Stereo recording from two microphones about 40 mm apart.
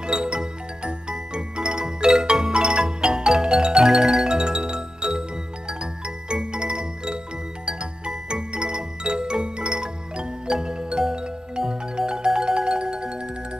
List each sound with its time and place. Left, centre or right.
0.0 s music: right